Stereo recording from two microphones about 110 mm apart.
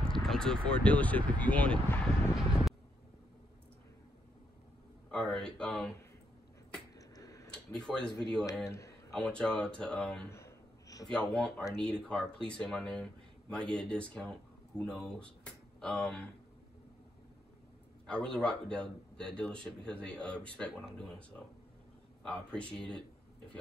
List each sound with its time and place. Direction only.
0.0 s speech: 5° left (ahead or behind)
5.1 s a man's voice: 5° left (ahead or behind)
7.0 s a sound: 30° left (ahead or behind)
7.8 s a man's voice: 5° left (ahead or behind)
8.6 s speech: 25° left (ahead or behind)
9.1 s a man's voice: 10° left (ahead or behind)
10.3 s a sound: 30° left (ahead or behind)
11.1 s a man's voice: 5° left (ahead or behind)
18.0 s a man's voice: 5° left (ahead or behind)
22.2 s a man's voice: 10° left (ahead or behind)